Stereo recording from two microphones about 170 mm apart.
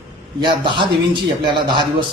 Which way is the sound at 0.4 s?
30° right (ahead or behind).